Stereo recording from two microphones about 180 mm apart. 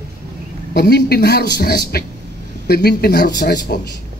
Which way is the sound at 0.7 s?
60° left (ahead or behind).